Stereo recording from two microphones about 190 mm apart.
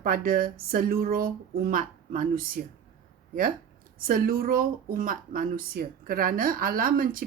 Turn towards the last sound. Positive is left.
turn(degrees=-50)  # may be behind; listen again after turning